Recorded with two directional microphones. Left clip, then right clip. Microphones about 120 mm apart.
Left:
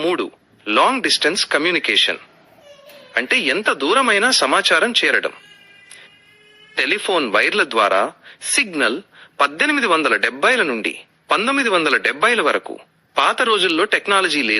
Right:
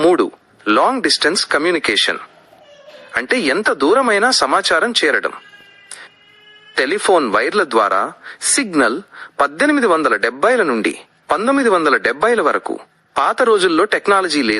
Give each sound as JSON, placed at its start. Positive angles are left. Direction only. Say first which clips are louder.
{"t": 0.0, "sound": "a sound", "louder": "right 7 dB", "side_deg": 15}
{"t": 0.8, "sound": "speech", "louder": "even", "side_deg": 20}
{"t": 6.7, "sound": "speech", "louder": "right 4 dB", "side_deg": 20}